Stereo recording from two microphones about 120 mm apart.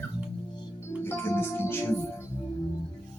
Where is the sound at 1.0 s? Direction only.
20° left (ahead or behind).